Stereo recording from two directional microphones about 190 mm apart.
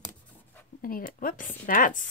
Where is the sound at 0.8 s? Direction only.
45° left (ahead or behind).